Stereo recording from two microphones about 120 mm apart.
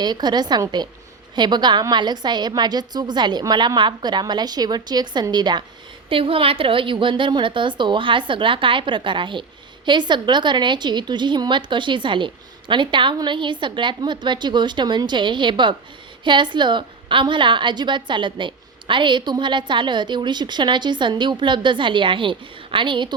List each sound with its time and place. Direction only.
0.0 s a woman's voice: 35° right (ahead or behind)
6.1 s a woman's voice: 50° right (ahead or behind)